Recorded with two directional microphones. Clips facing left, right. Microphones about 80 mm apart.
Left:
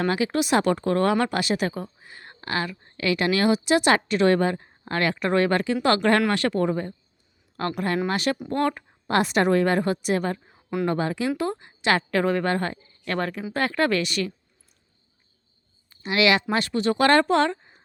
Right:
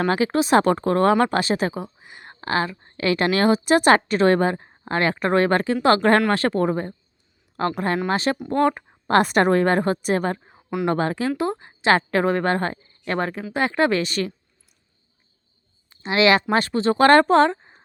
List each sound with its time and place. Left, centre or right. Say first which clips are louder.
0.0 s a woman's voice: right 3 dB; right
1.7 s a sound: right 2 dB; centre
2.3 s a woman's voice: right 5 dB; right
9.0 s a woman's voice: right 4 dB; right
10.8 s speech: right 4 dB; right
11.3 s a woman's voice: right 3 dB; right
14.0 s a woman's voice: right 2 dB; right
15.9 s speech: right 3 dB; right